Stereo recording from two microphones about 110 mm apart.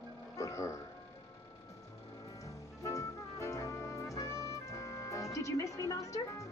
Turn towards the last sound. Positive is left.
turn(degrees=30)  # may be behind; listen again after turning